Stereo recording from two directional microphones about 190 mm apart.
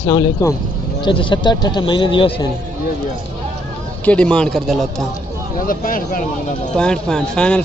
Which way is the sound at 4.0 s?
5° left (ahead or behind).